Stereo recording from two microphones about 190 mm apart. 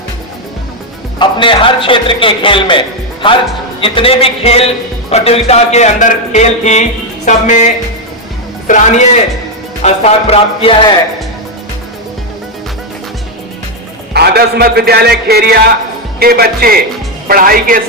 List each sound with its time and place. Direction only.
1.2 s a man's voice: 25° left (ahead or behind)
14.1 s a man's voice: 60° right (ahead or behind)